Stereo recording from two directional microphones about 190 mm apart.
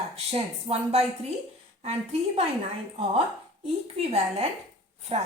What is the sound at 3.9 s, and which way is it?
Speech, 35° right (ahead or behind).